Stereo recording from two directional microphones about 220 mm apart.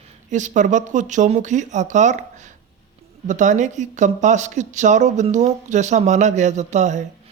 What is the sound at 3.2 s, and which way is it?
Speech, 35° right (ahead or behind).